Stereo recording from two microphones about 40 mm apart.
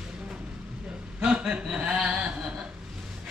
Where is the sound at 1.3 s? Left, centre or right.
Right.